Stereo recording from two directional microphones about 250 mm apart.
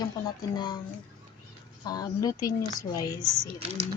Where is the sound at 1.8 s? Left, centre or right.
Centre.